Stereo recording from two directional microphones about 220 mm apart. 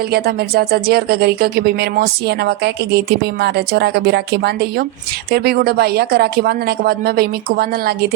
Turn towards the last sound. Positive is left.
turn(degrees=-45)  # may be behind; listen again after turning